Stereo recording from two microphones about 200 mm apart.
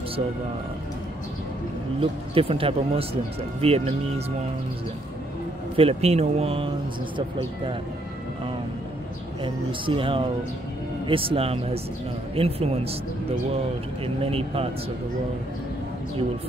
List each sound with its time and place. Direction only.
2.0 s speech: 25° right (ahead or behind)
5.8 s speech: 30° right (ahead or behind)
9.4 s speech: 25° right (ahead or behind)
14.0 s speech: 30° right (ahead or behind)